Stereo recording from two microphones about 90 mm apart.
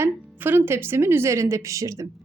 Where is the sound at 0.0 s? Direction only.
20° right (ahead or behind).